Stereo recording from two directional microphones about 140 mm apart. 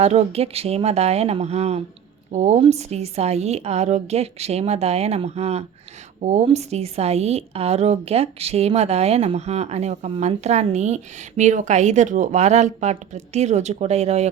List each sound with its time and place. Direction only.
0.0 s a woman's voice: 50° right (ahead or behind)